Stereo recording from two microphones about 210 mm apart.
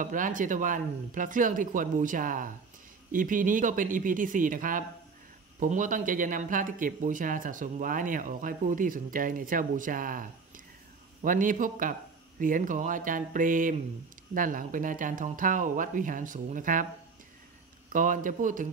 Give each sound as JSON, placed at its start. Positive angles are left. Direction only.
{"t": 0.0, "sound": "speech", "side_deg": -40}
{"t": 17.9, "sound": "speech", "side_deg": -40}